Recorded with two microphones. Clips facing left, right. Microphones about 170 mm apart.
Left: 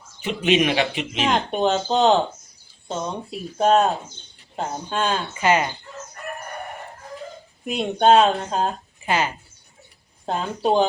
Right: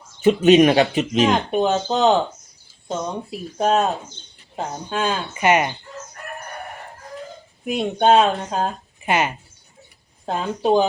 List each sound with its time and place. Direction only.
0.3 s speech: 45° right (ahead or behind)
1.5 s speech: 5° right (ahead or behind)
5.4 s speech: 20° right (ahead or behind)
7.6 s speech: 5° right (ahead or behind)
9.0 s speech: 20° right (ahead or behind)
10.2 s speech: centre (ahead or behind)